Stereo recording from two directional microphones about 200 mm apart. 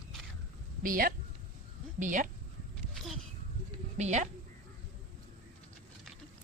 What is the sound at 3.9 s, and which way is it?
Speech, 35° right (ahead or behind).